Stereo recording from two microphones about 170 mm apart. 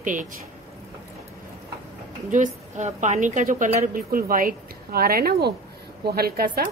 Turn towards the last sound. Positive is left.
turn(degrees=-60)  # may be behind; listen again after turning